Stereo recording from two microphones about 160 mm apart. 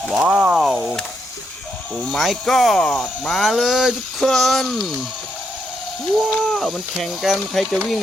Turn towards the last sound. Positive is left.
turn(degrees=0)  # may be behind; listen again after turning